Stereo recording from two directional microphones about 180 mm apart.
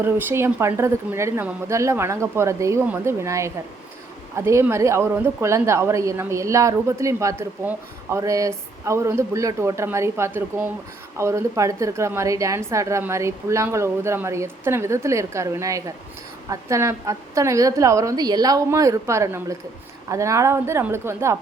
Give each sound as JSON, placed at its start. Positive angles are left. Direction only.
{"t": 0.0, "sound": "a woman's voice", "side_deg": -10}